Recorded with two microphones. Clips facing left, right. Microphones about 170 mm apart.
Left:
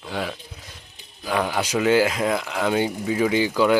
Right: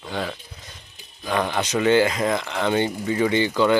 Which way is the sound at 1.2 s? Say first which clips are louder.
Even; 5° left (ahead or behind).